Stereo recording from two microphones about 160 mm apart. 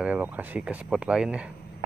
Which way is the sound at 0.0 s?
10° right (ahead or behind).